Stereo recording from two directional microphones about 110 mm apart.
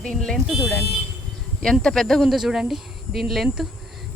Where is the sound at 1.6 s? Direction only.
5° left (ahead or behind).